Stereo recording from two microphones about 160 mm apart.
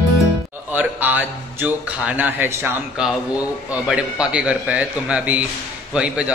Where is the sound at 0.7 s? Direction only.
10° right (ahead or behind).